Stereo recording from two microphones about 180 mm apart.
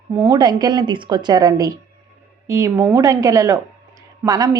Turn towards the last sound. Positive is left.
turn(degrees=-20)  # may be behind; listen again after turning